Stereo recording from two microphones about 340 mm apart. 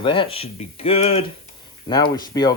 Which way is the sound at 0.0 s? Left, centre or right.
Centre.